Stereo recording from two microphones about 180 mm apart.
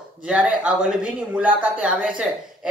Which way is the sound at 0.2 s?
5° right (ahead or behind).